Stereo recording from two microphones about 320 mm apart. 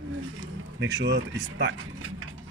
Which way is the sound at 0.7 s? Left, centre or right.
Right.